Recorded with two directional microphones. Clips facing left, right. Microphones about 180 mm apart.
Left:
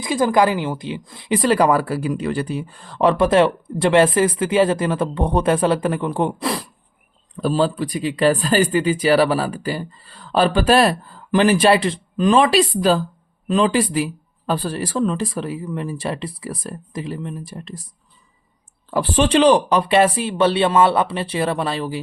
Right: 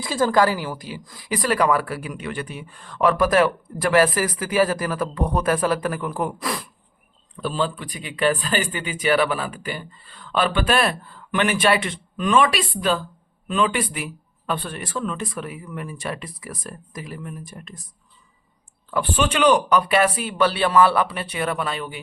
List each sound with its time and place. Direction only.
0.0 s speech: 15° left (ahead or behind)
18.9 s speech: 35° left (ahead or behind)